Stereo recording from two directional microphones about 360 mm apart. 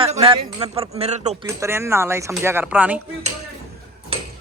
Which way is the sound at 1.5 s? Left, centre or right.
Centre.